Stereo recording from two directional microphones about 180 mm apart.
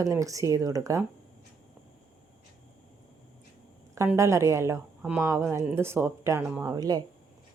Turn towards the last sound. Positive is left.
turn(degrees=-20)  # may be behind; listen again after turning